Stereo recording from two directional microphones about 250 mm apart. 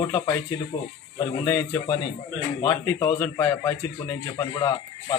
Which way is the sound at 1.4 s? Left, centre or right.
Centre.